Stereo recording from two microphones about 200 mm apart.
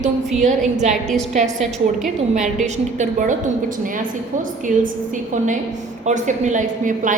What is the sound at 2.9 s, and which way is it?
Speech, 40° right (ahead or behind).